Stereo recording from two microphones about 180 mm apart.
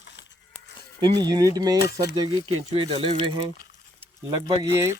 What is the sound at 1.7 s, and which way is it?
Speech, 65° left (ahead or behind).